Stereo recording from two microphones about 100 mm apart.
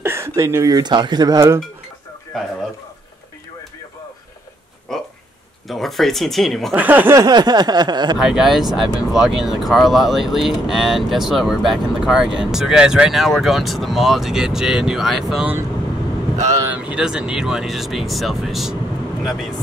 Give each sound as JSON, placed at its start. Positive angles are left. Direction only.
{"t": 0.0, "sound": "speech", "side_deg": -25}
{"t": 4.9, "sound": "a sound", "side_deg": 5}
{"t": 5.7, "sound": "speech", "side_deg": 0}
{"t": 6.7, "sound": "speech", "side_deg": -15}
{"t": 7.2, "sound": "a sound", "side_deg": -45}
{"t": 8.2, "sound": "speech", "side_deg": -5}
{"t": 16.6, "sound": "speech", "side_deg": -15}